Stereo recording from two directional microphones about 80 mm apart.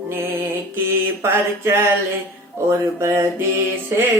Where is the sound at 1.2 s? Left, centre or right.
Right.